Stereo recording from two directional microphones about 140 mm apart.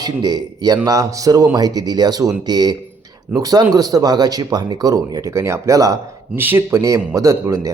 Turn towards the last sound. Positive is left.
turn(degrees=-20)  # may be behind; listen again after turning